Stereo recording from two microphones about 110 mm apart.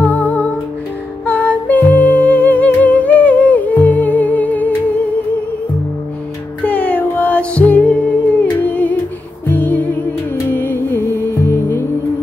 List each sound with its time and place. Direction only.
0.0 s music: 15° left (ahead or behind)
6.6 s music: 15° left (ahead or behind)
8.6 s humming: 15° left (ahead or behind)
9.5 s music: 15° left (ahead or behind)